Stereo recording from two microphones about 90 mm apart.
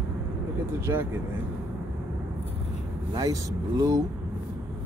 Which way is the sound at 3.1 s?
40° right (ahead or behind).